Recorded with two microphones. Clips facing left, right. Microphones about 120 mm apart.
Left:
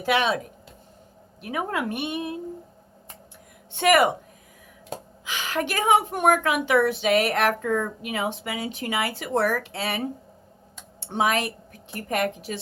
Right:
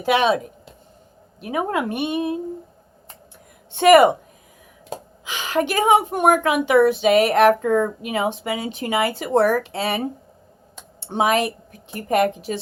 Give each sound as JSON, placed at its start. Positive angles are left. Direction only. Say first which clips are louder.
{"t": 0.0, "sound": "a woman's voice", "louder": "right 5 dB", "side_deg": -20}
{"t": 3.7, "sound": "a woman's voice", "louder": "right 7 dB", "side_deg": -25}